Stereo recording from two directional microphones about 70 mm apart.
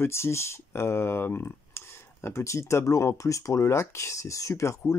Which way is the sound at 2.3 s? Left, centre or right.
Left.